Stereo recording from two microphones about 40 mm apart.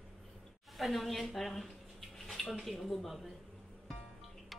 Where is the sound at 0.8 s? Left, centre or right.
Centre.